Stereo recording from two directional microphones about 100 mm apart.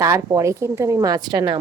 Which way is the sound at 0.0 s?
30° right (ahead or behind).